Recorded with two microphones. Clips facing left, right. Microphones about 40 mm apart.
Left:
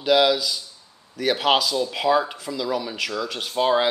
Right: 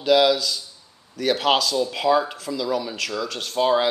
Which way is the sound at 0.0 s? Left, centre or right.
Centre.